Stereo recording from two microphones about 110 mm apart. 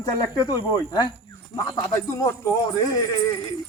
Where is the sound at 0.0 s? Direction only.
35° left (ahead or behind).